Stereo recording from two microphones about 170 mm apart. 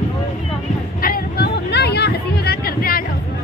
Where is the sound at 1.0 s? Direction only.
60° left (ahead or behind).